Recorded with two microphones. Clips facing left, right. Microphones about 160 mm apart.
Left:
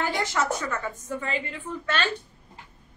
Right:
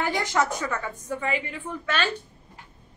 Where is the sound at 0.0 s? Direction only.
15° right (ahead or behind).